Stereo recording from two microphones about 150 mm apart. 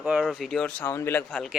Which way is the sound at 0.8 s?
15° left (ahead or behind).